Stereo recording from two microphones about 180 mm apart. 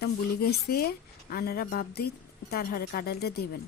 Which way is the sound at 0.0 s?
60° left (ahead or behind).